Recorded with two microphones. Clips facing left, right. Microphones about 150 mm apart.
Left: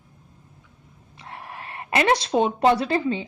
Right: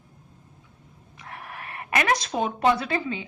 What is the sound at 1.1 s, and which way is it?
Speech, 30° left (ahead or behind).